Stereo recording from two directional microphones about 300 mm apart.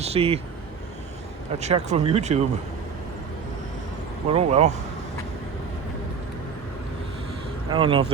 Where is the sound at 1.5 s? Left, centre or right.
Right.